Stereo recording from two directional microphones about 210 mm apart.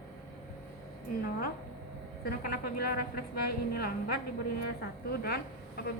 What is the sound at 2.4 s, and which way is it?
Speech, 45° left (ahead or behind).